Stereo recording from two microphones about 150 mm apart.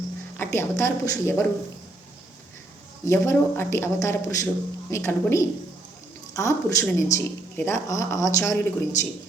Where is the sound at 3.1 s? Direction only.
20° left (ahead or behind).